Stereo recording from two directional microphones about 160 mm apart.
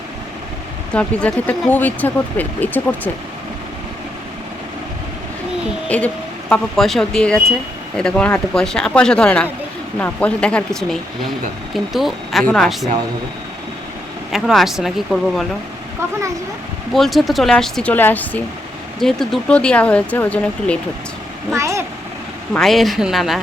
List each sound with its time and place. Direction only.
0.9 s speech: 5° left (ahead or behind)
5.9 s speech: 10° left (ahead or behind)
14.3 s speech: centre (ahead or behind)
16.9 s speech: centre (ahead or behind)
21.5 s vehicle: 20° right (ahead or behind)
22.5 s speech: centre (ahead or behind)